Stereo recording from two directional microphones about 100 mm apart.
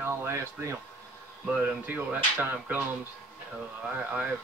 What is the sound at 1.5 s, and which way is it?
Speech, 15° right (ahead or behind).